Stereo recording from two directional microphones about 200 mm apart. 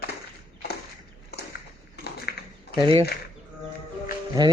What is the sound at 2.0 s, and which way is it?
Shuffling cards, 50° left (ahead or behind).